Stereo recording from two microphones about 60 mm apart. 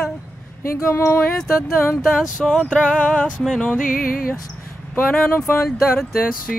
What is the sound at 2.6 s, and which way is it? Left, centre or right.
Music, centre.